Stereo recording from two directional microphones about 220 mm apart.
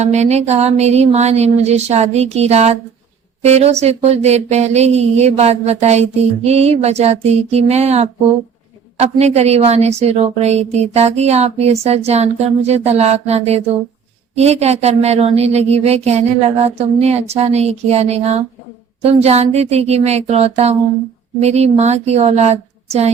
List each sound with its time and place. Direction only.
0.0 s a woman's voice: 30° right (ahead or behind)